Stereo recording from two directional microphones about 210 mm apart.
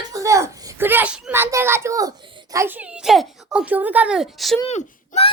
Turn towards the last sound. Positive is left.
turn(degrees=30)  # may be behind; listen again after turning